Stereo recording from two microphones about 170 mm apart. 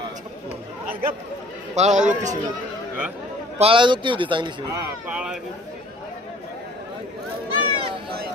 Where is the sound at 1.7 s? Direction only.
45° right (ahead or behind).